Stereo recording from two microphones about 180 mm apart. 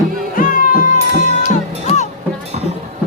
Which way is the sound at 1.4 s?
35° left (ahead or behind).